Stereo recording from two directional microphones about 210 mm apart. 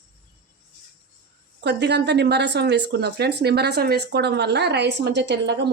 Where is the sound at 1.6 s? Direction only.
55° right (ahead or behind).